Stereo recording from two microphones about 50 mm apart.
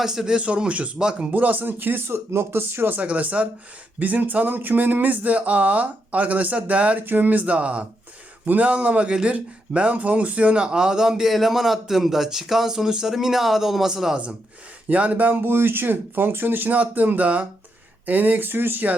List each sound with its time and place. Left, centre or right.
0.0 s speech: centre
0.3 s speech: right
0.9 s speech: centre
1.3 s speech: right
2.1 s speech: right
2.6 s speech: right
7.0 s speech: right; by 14.2 s centre
14.8 s speech: right
15.4 s speech: right
16.7 s speech: right